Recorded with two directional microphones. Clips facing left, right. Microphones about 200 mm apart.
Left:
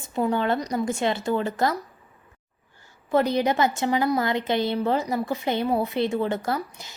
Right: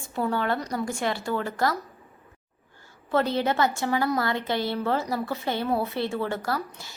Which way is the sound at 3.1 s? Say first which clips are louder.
Left 3 dB; 15° left (ahead or behind).